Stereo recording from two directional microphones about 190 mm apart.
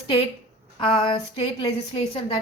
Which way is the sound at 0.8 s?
25° left (ahead or behind).